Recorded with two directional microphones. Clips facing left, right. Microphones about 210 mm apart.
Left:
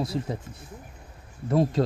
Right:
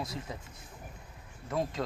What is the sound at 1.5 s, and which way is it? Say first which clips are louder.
Speech: left 10 dB; 35° left (ahead or behind).